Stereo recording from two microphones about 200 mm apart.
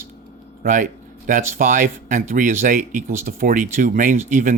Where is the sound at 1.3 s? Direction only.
40° right (ahead or behind).